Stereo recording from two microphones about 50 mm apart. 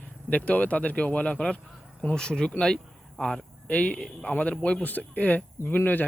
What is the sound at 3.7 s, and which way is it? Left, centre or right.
Speech, left.